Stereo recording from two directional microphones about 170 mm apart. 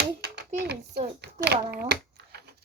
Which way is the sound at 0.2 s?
75° right (ahead or behind).